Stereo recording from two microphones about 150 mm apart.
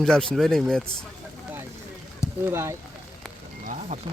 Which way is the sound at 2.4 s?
15° right (ahead or behind).